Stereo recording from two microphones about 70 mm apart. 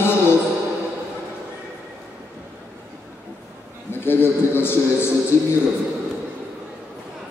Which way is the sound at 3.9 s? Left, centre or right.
Left.